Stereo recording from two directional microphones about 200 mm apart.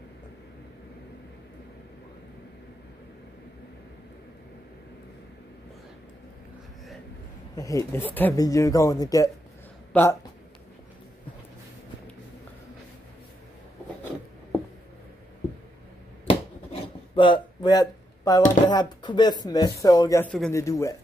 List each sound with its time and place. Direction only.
7.5 s speech: 15° left (ahead or behind)
9.9 s speech: 5° left (ahead or behind)
16.8 s a sound: 25° left (ahead or behind)
18.7 s speech: 20° left (ahead or behind)
20.2 s speech: 5° left (ahead or behind)